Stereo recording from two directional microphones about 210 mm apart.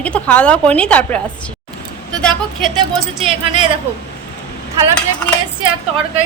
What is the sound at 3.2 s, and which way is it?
Speech, 25° right (ahead or behind).